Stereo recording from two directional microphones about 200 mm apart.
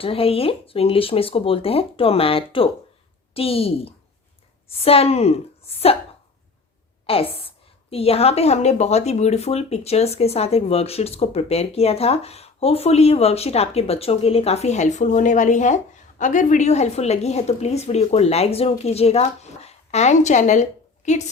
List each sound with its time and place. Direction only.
0.0 s speech: 30° left (ahead or behind)
7.1 s a woman's voice: 30° left (ahead or behind)